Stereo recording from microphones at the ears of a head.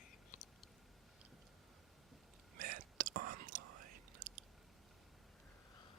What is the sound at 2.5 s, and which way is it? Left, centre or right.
Whispering, right.